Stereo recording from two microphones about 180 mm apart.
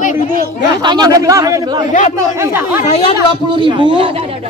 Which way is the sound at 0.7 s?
25° right (ahead or behind).